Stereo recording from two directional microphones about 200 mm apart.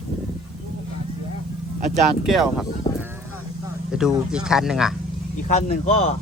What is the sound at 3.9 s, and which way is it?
Speech, 5° right (ahead or behind).